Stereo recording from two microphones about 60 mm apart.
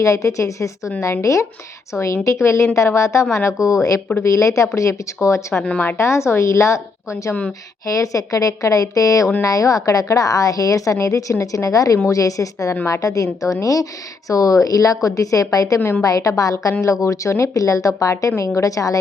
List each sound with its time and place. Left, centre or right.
0.0 s a woman's voice: left
7.9 s a woman's voice: left
15.8 s a woman's voice: left
16.0 s a woman's voice: left
16.8 s a woman's voice: left